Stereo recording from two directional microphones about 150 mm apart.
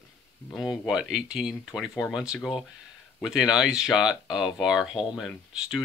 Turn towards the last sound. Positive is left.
turn(degrees=0)  # may be behind; listen again after turning